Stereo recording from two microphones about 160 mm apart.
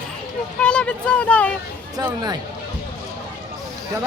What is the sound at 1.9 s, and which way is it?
Speech, 25° right (ahead or behind).